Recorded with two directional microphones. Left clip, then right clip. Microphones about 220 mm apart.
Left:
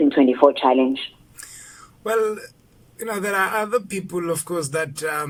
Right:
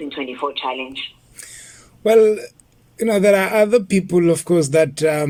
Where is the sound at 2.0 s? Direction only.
15° right (ahead or behind).